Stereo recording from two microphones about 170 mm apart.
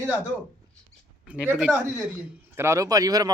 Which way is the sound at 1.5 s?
5° right (ahead or behind).